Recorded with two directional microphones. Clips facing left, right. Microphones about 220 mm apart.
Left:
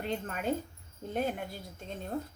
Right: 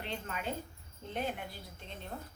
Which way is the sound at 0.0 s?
45° left (ahead or behind).